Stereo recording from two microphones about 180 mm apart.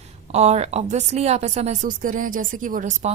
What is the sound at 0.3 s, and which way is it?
A woman's voice, 40° right (ahead or behind).